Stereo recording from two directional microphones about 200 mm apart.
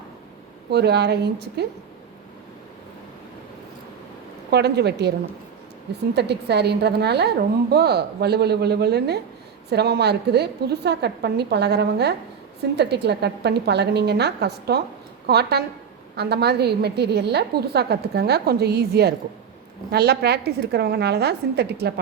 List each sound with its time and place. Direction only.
0.7 s a woman's voice: 55° right (ahead or behind)
4.5 s a woman's voice: 55° right (ahead or behind)
6.1 s a woman's voice: 55° right (ahead or behind)